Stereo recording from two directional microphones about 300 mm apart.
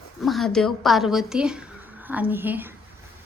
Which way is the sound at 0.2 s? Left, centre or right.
Centre.